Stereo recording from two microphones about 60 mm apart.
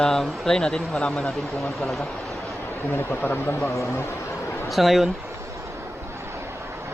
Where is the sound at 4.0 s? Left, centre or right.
Left.